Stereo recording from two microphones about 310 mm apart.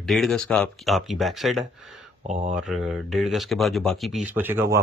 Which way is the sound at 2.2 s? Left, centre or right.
Right.